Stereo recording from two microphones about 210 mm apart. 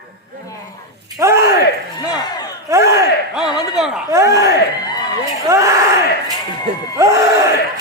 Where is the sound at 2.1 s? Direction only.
20° left (ahead or behind).